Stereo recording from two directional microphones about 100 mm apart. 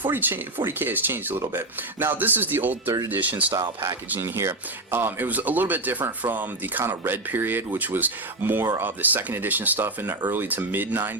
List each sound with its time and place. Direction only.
0.0 s speech: 20° right (ahead or behind)
3.5 s speech: 40° right (ahead or behind)
4.1 s speech: 25° right (ahead or behind)